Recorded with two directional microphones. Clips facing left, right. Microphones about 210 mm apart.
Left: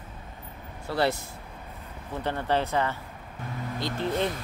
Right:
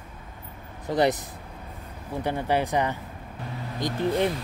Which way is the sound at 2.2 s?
10° right (ahead or behind).